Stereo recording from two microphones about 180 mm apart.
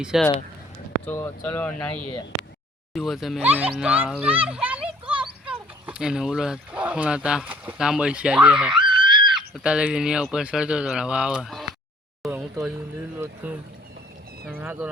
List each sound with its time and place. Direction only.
0.0 s speech: 5° right (ahead or behind)
1.0 s speech: 10° left (ahead or behind)
2.9 s a child's voice: centre (ahead or behind)
9.0 s screaming: 25° right (ahead or behind)
9.3 s speech: 5° right (ahead or behind)
12.2 s a sound: centre (ahead or behind)
13.1 s speech: 10° right (ahead or behind)